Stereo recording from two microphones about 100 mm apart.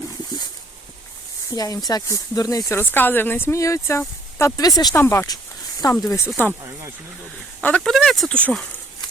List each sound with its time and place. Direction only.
1.5 s speech: 40° left (ahead or behind)
4.9 s speech: 25° left (ahead or behind)
7.6 s speech: 5° left (ahead or behind)
8.4 s speech: 10° left (ahead or behind)